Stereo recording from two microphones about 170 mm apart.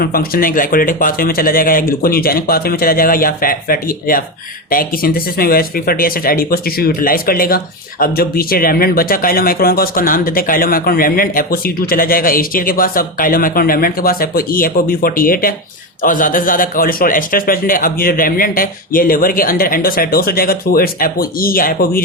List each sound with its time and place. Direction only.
0.0 s speech: 60° left (ahead or behind)